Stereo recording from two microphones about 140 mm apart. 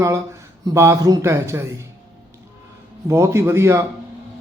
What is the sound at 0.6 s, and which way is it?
A man's voice, 20° right (ahead or behind).